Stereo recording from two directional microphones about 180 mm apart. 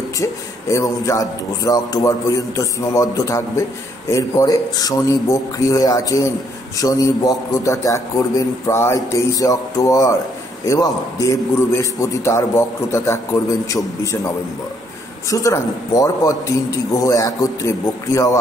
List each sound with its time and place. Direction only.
0.2 s a man's voice: 15° left (ahead or behind)